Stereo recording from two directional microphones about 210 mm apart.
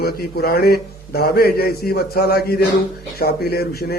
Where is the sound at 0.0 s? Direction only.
50° left (ahead or behind).